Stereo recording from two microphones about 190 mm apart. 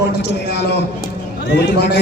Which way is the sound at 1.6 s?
60° left (ahead or behind).